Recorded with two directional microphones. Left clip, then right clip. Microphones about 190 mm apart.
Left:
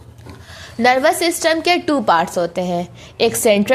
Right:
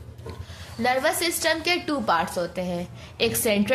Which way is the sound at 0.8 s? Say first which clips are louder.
Left 9 dB; 40° left (ahead or behind).